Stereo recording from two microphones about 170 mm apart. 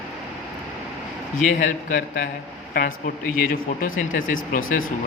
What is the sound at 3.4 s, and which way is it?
Speech, 55° left (ahead or behind).